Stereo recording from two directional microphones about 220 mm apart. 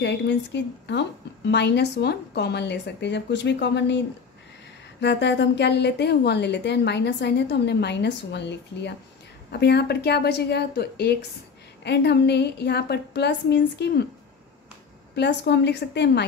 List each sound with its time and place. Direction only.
0.0 s a woman's voice: 50° left (ahead or behind)
5.0 s a woman's voice: 50° left (ahead or behind)
15.1 s a woman's voice: 50° left (ahead or behind)